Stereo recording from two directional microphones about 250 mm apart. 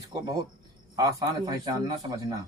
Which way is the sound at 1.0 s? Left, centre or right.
Centre.